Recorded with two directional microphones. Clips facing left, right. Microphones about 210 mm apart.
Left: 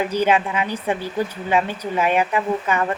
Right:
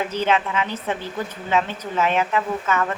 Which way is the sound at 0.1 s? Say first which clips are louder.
Left 3 dB; 15° left (ahead or behind).